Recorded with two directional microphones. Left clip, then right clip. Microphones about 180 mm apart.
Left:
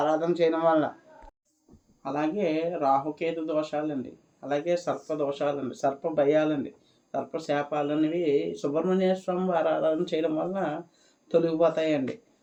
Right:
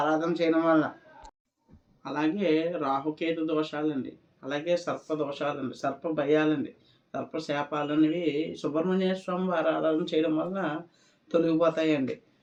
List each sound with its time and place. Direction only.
0.1 s speech: 40° left (ahead or behind)
2.0 s speech: 45° left (ahead or behind)